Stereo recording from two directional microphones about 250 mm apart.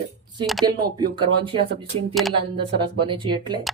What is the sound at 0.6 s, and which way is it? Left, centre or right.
Speech, centre.